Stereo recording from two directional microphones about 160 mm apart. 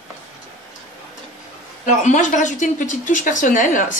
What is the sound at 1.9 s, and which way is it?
A woman's voice, 50° left (ahead or behind).